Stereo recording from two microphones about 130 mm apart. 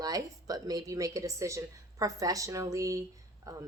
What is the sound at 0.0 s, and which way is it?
A woman's voice, 30° right (ahead or behind).